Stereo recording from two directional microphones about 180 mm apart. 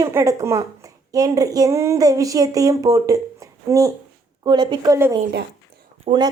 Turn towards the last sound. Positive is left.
turn(degrees=-25)  # may be behind; listen again after turning